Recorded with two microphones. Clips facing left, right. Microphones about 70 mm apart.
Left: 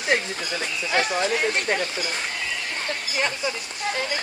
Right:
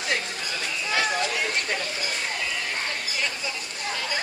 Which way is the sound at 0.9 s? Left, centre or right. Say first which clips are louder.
Left 3 dB; left.